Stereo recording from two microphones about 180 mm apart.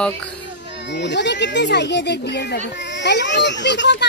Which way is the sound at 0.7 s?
75° left (ahead or behind).